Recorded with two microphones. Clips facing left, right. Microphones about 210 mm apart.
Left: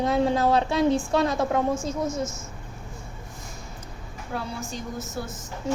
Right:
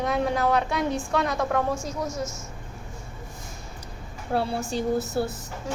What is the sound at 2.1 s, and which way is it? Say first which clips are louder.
Speech: left 3 dB; centre (ahead or behind).